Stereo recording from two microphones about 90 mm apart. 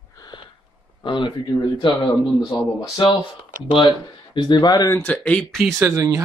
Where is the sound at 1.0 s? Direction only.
60° left (ahead or behind).